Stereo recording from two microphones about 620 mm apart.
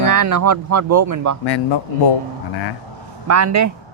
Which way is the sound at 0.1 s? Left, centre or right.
Right.